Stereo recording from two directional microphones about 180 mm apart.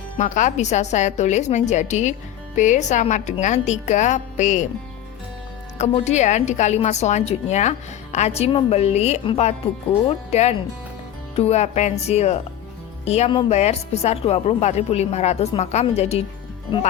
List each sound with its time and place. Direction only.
0.2 s a woman's voice: 45° left (ahead or behind)
5.7 s a woman's voice: 40° left (ahead or behind)
11.3 s a woman's voice: 35° left (ahead or behind)